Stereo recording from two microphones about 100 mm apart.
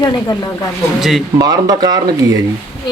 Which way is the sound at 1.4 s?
40° right (ahead or behind).